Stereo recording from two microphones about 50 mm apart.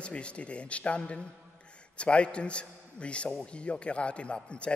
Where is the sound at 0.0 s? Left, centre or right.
Left.